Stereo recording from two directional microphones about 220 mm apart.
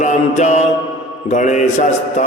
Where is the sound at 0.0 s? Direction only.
35° left (ahead or behind).